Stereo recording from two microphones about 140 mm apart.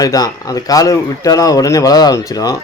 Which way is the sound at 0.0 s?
25° left (ahead or behind).